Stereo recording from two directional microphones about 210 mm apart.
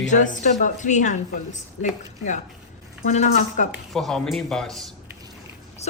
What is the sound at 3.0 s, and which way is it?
Speech, 35° left (ahead or behind).